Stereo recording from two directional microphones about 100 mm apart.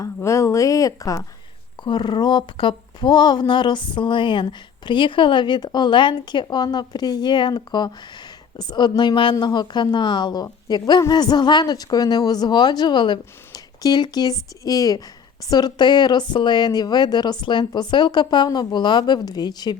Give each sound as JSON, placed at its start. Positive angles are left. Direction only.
{"t": 0.0, "sound": "speech", "side_deg": 30}
{"t": 1.8, "sound": "speech", "side_deg": 50}